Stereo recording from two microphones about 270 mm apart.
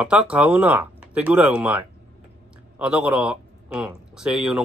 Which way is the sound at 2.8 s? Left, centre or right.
Centre.